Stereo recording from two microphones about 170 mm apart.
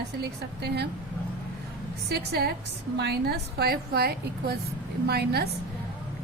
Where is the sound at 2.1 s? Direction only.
65° right (ahead or behind).